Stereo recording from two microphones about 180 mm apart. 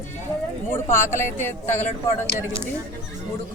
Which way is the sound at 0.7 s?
15° left (ahead or behind).